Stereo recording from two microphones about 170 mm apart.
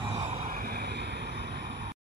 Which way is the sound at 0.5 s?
65° right (ahead or behind).